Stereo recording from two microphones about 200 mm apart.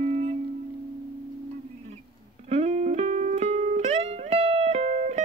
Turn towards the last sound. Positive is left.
turn(degrees=-35)  # may be behind; listen again after turning